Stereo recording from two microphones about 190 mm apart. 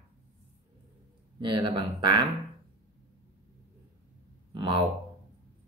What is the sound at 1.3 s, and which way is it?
Speech, 25° right (ahead or behind).